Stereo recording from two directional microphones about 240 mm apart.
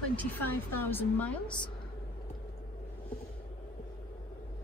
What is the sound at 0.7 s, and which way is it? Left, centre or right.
Speech, centre.